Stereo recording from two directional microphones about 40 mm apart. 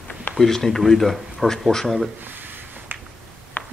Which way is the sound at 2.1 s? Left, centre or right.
Right.